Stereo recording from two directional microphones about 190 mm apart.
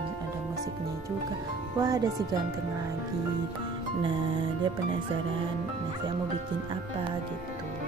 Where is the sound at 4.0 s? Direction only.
25° right (ahead or behind).